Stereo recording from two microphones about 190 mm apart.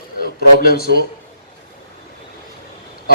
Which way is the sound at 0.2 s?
55° left (ahead or behind).